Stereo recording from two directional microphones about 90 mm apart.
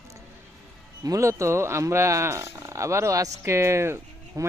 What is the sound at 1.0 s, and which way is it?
Speech, 40° right (ahead or behind).